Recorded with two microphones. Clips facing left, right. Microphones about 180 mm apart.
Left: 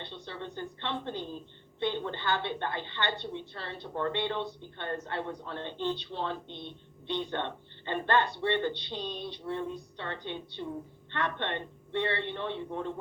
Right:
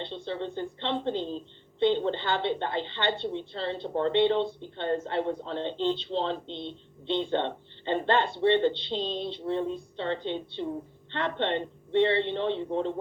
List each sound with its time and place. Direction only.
0.3 s a woman's voice: 25° right (ahead or behind)